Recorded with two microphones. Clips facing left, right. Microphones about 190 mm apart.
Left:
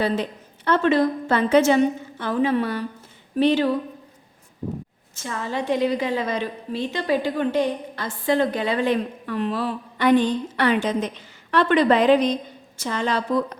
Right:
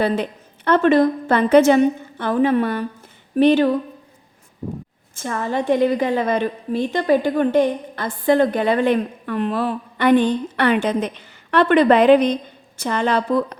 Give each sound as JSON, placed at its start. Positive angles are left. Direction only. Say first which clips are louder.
{"t": 0.0, "sound": "a woman's voice", "louder": "right 3 dB", "side_deg": -60}
{"t": 5.1, "sound": "a woman's voice", "louder": "right 5 dB", "side_deg": -50}